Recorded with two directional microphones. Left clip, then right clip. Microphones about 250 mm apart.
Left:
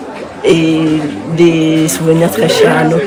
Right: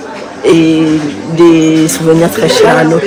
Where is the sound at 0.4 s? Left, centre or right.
Centre.